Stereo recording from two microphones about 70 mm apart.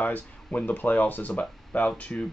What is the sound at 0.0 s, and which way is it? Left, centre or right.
Speech, left.